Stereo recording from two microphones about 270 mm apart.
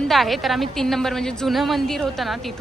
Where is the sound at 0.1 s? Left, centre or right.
Centre.